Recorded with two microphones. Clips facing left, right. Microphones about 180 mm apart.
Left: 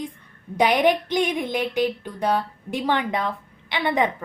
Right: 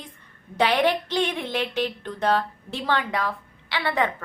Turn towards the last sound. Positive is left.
turn(degrees=20)  # may be behind; listen again after turning